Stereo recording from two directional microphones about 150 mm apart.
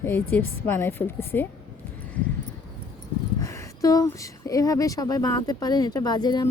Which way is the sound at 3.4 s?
20° left (ahead or behind).